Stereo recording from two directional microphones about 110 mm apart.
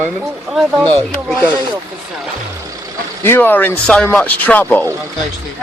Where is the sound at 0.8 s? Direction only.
10° left (ahead or behind).